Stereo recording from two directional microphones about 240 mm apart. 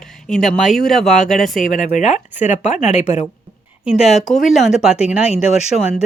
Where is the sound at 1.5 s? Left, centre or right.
Left.